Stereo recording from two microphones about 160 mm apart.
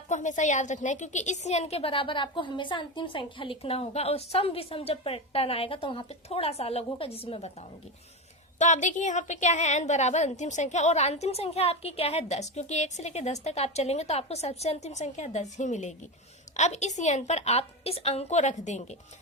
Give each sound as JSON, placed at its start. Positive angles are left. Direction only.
{"t": 0.1, "sound": "a woman's voice", "side_deg": 50}
{"t": 8.5, "sound": "a woman's voice", "side_deg": 50}